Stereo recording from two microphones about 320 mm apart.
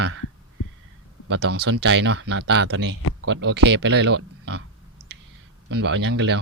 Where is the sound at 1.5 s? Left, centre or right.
Right.